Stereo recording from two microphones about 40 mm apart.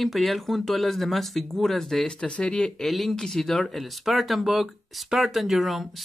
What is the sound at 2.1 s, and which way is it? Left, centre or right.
Speech, left.